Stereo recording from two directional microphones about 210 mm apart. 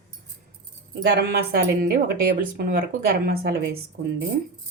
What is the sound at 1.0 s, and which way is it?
Speech, 50° right (ahead or behind).